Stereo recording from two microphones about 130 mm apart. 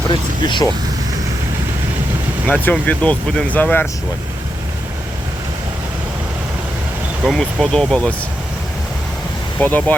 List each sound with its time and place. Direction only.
0.1 s speech: 35° left (ahead or behind)
2.5 s speech: 10° left (ahead or behind)
7.3 s speech: centre (ahead or behind)
9.6 s speech: 10° left (ahead or behind)